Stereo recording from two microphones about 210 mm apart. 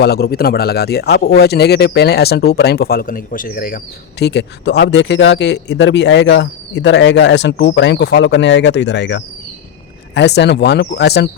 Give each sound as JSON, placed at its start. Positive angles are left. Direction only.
{"t": 0.0, "sound": "speech", "side_deg": 50}
{"t": 4.2, "sound": "speech", "side_deg": 55}